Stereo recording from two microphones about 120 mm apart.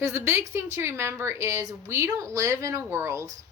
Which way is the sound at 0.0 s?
20° right (ahead or behind).